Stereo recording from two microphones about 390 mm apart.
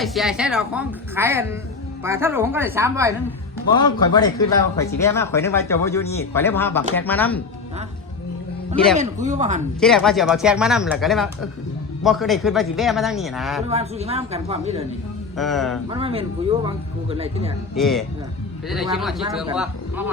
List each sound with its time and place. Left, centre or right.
0.0 s a woman's voice: centre
3.8 s a woman's voice: centre
9.0 s speech: centre
9.8 s a woman's voice: centre
13.7 s speech: centre
15.4 s a woman's voice: centre
15.9 s speech: centre
17.7 s a woman's voice: centre